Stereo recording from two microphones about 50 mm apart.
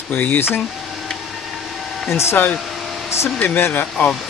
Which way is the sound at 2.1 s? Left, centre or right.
Left.